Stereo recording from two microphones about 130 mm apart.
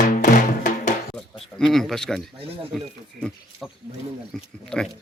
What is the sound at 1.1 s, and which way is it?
Bleat, 5° left (ahead or behind).